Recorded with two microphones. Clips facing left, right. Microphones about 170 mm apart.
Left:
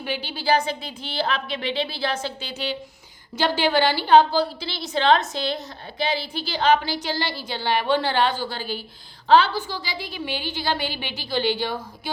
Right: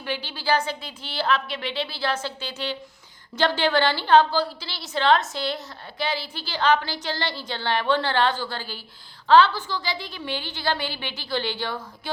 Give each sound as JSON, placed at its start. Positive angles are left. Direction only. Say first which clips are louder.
{"t": 0.0, "sound": "a woman's voice", "louder": "left 2 dB", "side_deg": 15}